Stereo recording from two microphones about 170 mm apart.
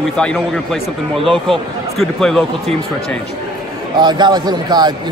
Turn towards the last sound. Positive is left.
turn(degrees=-25)  # may be behind; listen again after turning